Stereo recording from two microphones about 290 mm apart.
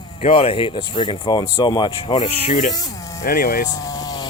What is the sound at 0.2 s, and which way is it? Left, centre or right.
Speech, left.